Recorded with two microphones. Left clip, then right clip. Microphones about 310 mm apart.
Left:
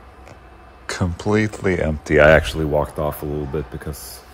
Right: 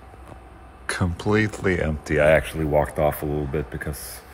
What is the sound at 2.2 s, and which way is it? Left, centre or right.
Speech, left.